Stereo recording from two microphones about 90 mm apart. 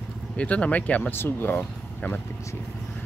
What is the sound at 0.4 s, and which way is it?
Speech, 15° left (ahead or behind).